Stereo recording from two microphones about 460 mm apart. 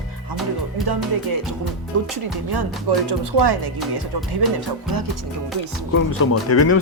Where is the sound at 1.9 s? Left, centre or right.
Right.